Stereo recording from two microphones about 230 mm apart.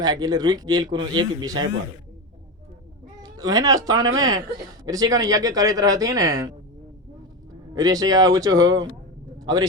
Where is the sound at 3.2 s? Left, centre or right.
Centre.